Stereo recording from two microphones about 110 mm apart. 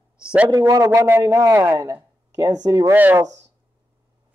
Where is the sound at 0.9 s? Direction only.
20° right (ahead or behind).